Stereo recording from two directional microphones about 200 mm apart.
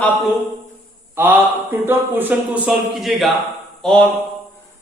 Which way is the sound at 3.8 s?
5° left (ahead or behind).